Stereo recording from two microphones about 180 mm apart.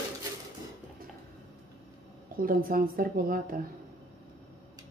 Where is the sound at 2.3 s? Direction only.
55° right (ahead or behind).